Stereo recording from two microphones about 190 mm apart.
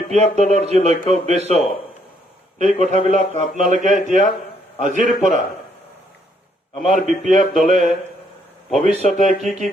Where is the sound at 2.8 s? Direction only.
40° right (ahead or behind).